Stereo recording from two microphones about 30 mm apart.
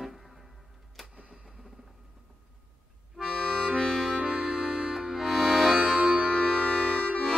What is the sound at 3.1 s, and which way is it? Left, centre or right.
Accordion, centre.